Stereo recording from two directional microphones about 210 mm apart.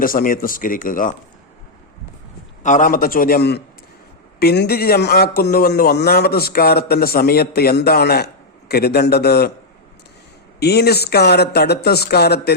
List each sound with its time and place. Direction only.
0.0 s speech: 40° left (ahead or behind)
2.6 s a man's voice: 40° left (ahead or behind)
10.6 s a man's voice: 50° left (ahead or behind)